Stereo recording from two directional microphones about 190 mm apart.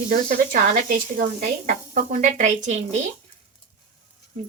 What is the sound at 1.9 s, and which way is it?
Speech, 40° right (ahead or behind).